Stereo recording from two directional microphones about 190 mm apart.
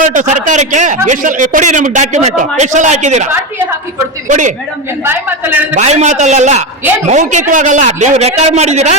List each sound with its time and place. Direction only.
0.0 s a man's voice: 40° right (ahead or behind)
4.3 s a man's voice: 40° right (ahead or behind)
5.0 s a man's voice: 10° right (ahead or behind)
5.7 s a man's voice: 35° right (ahead or behind)